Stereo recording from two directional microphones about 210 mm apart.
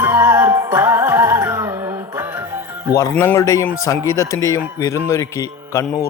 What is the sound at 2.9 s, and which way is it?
Speech, 15° left (ahead or behind).